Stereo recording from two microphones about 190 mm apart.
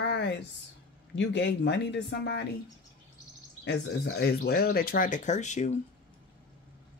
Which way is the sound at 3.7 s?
65° left (ahead or behind).